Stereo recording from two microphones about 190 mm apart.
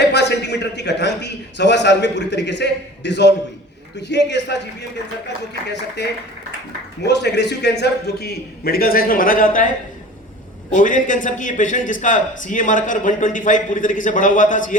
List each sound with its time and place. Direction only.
0.0 s a man's voice: 60° left (ahead or behind)
5.6 s a man's voice: 65° left (ahead or behind); by 9.6 s 45° left (ahead or behind)
10.7 s a man's voice: 45° left (ahead or behind)